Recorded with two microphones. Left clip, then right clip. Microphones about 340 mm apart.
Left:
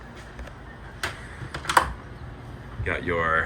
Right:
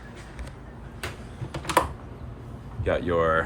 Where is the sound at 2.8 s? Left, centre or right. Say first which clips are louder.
Right 2 dB; centre.